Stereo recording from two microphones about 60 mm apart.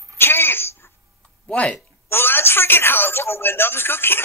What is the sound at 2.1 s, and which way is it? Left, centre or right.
A man's voice, left.